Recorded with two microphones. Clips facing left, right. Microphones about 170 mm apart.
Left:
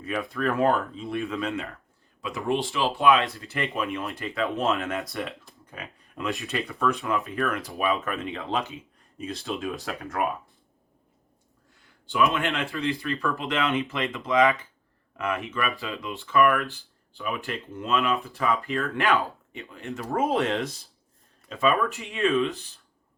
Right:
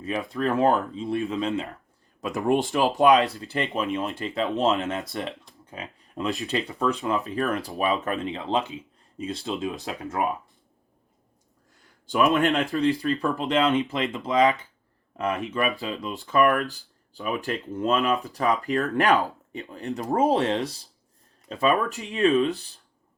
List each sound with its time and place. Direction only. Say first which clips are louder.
0.0 s speech: right 1 dB; 30° right (ahead or behind)
2.2 s speech: right 4 dB; 40° right (ahead or behind); by 5.0 s 20° right (ahead or behind)
5.7 s speech: right 4 dB; 30° right (ahead or behind)
9.6 s speech: right 1 dB; 20° right (ahead or behind)
12.1 s speech: right 4 dB; 40° right (ahead or behind)